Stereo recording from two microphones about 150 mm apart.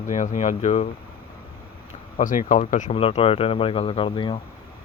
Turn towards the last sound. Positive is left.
turn(degrees=35)  # may be behind; listen again after turning